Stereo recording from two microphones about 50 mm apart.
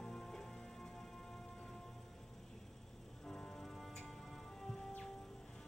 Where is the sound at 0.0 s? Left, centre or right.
Centre.